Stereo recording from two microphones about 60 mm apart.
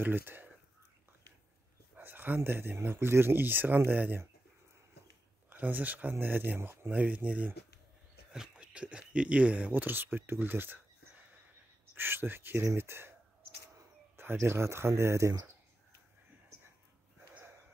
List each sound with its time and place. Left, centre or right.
0.0 s speech: right
2.0 s speech: right
5.5 s speech: right
14.1 s speech: right